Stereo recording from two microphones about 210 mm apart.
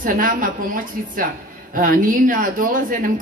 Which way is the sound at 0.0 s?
40° right (ahead or behind).